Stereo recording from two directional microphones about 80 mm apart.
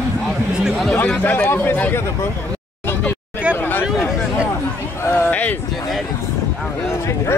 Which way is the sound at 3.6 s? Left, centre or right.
Left.